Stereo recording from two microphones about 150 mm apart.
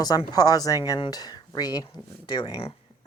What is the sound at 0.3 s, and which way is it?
Speech, 25° left (ahead or behind).